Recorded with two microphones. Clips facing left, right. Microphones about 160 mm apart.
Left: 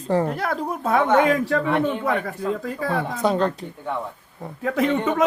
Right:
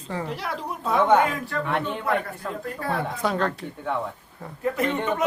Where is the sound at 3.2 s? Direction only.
20° left (ahead or behind).